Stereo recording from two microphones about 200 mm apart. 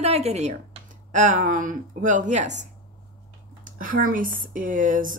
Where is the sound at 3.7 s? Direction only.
45° right (ahead or behind).